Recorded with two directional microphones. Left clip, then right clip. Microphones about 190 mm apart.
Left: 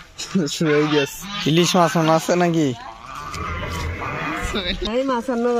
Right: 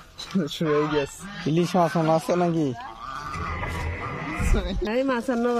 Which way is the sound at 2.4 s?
5° left (ahead or behind).